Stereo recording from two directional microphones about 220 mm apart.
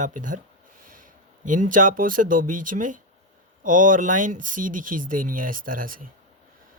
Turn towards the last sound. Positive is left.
turn(degrees=-40)  # may be behind; listen again after turning